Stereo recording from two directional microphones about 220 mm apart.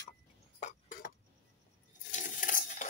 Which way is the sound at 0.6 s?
40° left (ahead or behind).